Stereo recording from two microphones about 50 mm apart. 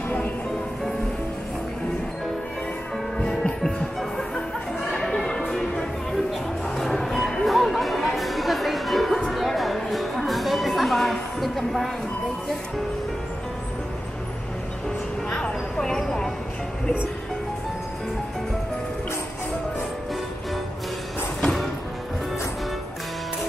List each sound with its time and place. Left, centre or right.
3.2 s music: centre
4.9 s music: centre
15.2 s a sound: centre